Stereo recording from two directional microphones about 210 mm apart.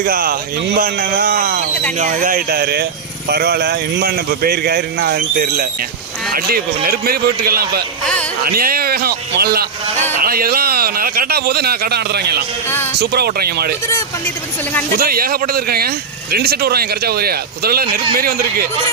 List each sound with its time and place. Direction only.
0.0 s speech: 45° right (ahead or behind)
8.0 s speech: 5° left (ahead or behind)
8.4 s a man's voice: 45° right (ahead or behind)
14.9 s speech: 45° right (ahead or behind)